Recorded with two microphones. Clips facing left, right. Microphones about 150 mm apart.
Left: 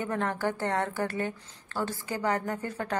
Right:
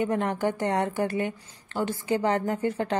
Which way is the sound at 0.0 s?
20° right (ahead or behind).